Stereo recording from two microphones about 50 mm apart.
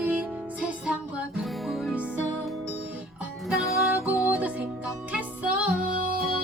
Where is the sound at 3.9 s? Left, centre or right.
Right.